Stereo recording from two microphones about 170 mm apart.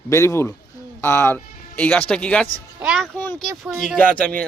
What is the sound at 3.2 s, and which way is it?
Speech, 10° left (ahead or behind).